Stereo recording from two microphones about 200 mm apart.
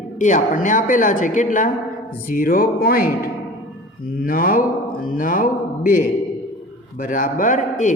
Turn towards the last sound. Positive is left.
turn(degrees=40)  # may be behind; listen again after turning